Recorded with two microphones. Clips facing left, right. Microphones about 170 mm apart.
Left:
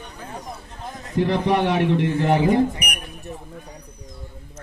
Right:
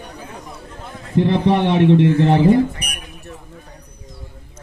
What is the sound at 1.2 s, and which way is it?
A man's voice, 25° right (ahead or behind).